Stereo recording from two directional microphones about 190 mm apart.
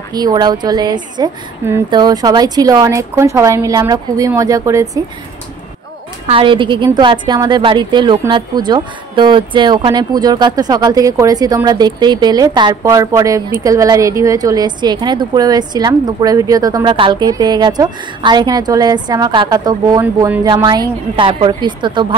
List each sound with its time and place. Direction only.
0.1 s speech: 20° right (ahead or behind)
6.2 s speech: 25° right (ahead or behind)